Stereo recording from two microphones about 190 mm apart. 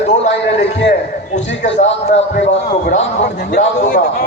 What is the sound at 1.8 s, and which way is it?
Speech, 35° left (ahead or behind).